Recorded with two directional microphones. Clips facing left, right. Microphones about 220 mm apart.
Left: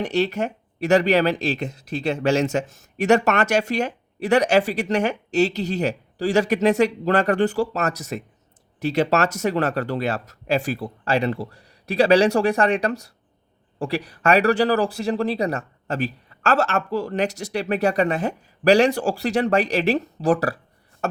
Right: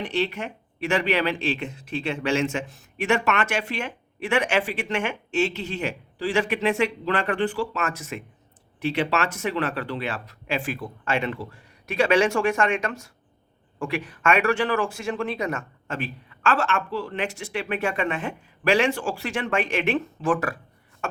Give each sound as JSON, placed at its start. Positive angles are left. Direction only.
{"t": 0.0, "sound": "speech", "side_deg": 40}